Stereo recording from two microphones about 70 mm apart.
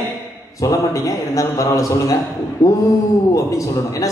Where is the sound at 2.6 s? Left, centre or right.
Left.